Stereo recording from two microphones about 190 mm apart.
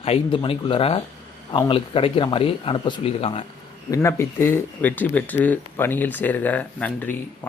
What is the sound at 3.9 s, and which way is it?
Speech, 15° left (ahead or behind).